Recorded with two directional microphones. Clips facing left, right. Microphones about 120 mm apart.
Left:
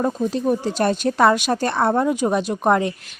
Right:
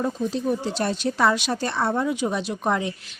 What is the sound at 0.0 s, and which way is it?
Speech, 50° left (ahead or behind).